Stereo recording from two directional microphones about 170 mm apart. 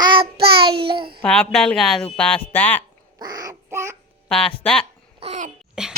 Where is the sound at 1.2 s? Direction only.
5° left (ahead or behind).